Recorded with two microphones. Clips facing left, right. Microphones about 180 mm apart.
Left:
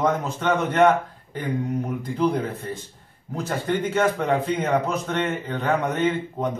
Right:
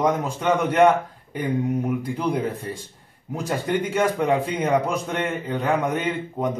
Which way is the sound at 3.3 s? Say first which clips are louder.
Right 1 dB; 15° right (ahead or behind).